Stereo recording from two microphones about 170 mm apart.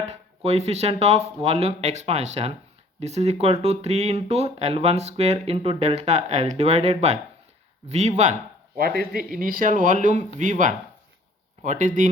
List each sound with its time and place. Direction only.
0.1 s speech: 40° right (ahead or behind)
9.0 s speech: 55° right (ahead or behind)